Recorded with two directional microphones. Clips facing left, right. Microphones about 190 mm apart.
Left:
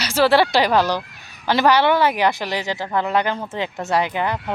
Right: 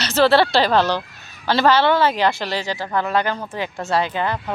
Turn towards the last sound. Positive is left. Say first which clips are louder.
# even
turn(degrees=15)  # may be behind; listen again after turning